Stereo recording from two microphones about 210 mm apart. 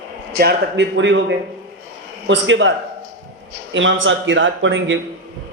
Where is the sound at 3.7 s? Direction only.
65° right (ahead or behind).